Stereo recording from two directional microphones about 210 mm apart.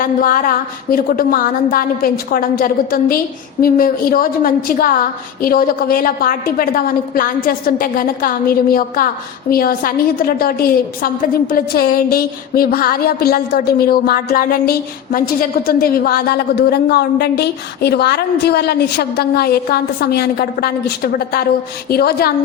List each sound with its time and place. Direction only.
0.0 s a woman's voice: 40° left (ahead or behind)